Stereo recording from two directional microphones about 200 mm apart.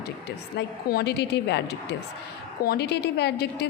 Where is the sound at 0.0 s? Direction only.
55° left (ahead or behind).